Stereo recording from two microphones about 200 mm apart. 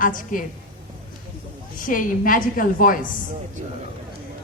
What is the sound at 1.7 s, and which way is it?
A woman's voice, 40° left (ahead or behind).